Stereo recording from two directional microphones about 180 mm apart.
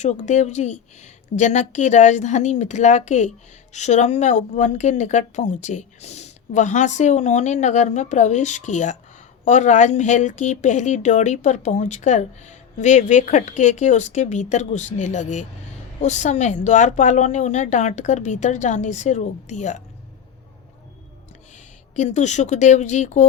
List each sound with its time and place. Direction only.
0.0 s a woman's voice: 40° left (ahead or behind)
21.9 s a woman's voice: 40° left (ahead or behind)